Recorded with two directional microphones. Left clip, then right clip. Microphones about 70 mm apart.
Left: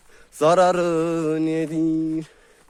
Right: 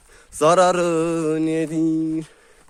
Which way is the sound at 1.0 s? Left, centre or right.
Centre.